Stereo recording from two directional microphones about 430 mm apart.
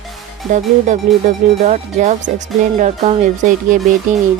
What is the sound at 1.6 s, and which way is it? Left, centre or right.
Speech, centre.